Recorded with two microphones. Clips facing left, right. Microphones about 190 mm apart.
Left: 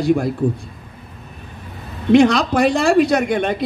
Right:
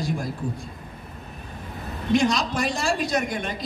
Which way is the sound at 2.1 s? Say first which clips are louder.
Left 9 dB; 65° left (ahead or behind).